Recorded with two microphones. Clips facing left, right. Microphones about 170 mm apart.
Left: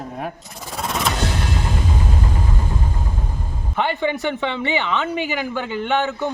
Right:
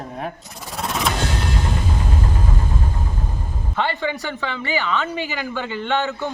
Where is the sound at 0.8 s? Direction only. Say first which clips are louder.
Even; centre (ahead or behind).